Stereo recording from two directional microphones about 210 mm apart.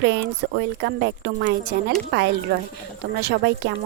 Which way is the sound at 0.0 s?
55° right (ahead or behind).